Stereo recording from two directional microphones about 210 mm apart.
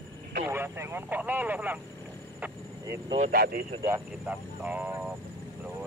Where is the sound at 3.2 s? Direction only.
45° right (ahead or behind).